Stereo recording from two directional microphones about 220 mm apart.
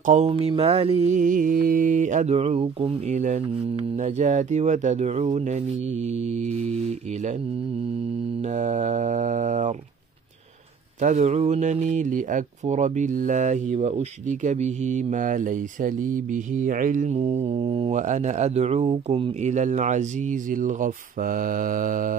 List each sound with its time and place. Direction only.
0.0 s speech: 30° right (ahead or behind)
8.5 s speech: 35° right (ahead or behind)
11.0 s speech: 35° right (ahead or behind)